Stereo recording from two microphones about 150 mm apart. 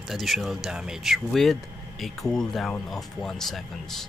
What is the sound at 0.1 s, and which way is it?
Speech, centre (ahead or behind).